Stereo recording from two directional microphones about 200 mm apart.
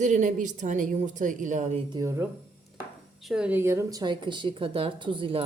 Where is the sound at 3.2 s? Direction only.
5° right (ahead or behind).